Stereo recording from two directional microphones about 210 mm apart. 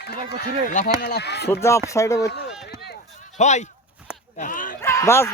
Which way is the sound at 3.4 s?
35° left (ahead or behind).